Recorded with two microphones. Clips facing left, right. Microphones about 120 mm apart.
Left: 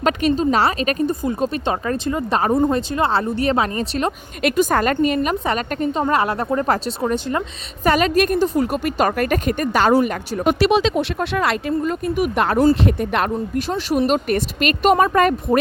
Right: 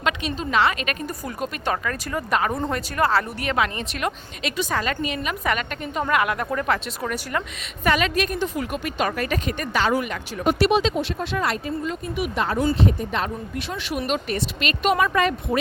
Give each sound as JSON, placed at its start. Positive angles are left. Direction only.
{"t": 0.0, "sound": "a woman's voice", "side_deg": 40}
{"t": 1.2, "sound": "speech", "side_deg": 25}
{"t": 4.4, "sound": "a woman's voice", "side_deg": 50}
{"t": 7.9, "sound": "a woman's voice", "side_deg": 40}
{"t": 10.4, "sound": "speech", "side_deg": 85}
{"t": 11.8, "sound": "a woman's voice", "side_deg": 50}
{"t": 12.8, "sound": "speech", "side_deg": 65}
{"t": 13.6, "sound": "a woman's voice", "side_deg": 40}